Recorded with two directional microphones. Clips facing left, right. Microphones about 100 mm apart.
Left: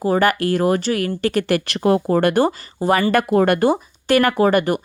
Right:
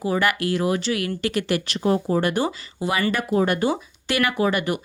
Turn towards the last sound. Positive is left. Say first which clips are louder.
# left 6 dB
turn(degrees=45)  # may be behind; listen again after turning